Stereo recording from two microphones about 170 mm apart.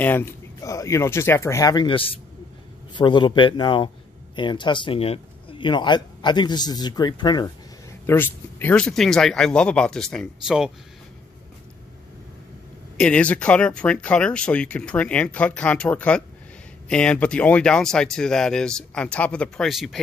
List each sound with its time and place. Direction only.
0.0 s speech: 15° left (ahead or behind)
8.1 s speech: 10° left (ahead or behind); by 10.7 s 5° right (ahead or behind)
13.0 s speech: 10° left (ahead or behind)